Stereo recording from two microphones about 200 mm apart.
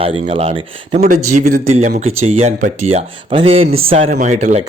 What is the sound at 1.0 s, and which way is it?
A man's voice, 40° right (ahead or behind).